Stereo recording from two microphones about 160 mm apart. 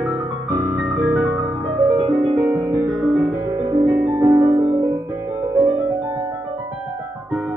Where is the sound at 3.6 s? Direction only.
25° right (ahead or behind).